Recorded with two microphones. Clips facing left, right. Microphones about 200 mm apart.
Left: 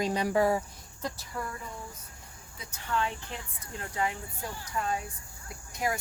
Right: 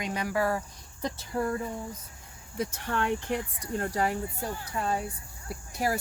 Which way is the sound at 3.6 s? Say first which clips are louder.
Even; 40° right (ahead or behind).